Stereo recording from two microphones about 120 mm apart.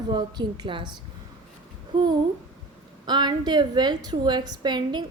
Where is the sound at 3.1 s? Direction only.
40° right (ahead or behind).